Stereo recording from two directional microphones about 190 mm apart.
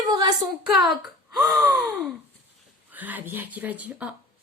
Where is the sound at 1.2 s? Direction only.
5° right (ahead or behind).